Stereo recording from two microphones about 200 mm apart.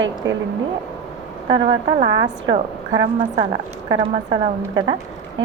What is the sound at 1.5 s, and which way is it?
A woman's voice, 20° right (ahead or behind).